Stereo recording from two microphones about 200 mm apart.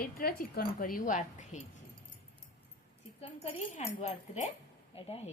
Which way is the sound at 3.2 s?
35° left (ahead or behind).